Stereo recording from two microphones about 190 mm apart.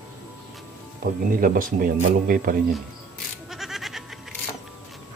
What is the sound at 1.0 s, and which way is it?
Speech, 45° right (ahead or behind).